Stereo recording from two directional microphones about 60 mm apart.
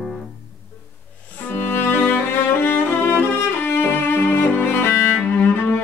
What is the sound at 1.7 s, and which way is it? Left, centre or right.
Music, left.